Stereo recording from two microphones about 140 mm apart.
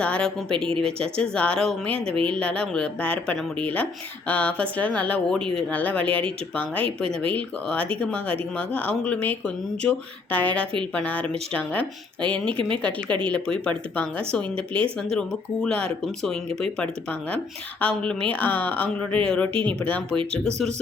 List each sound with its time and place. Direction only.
0.0 s speech: 10° left (ahead or behind)
2.1 s speech: 40° right (ahead or behind)
2.4 s speech: 5° left (ahead or behind)
15.6 s speech: 5° left (ahead or behind)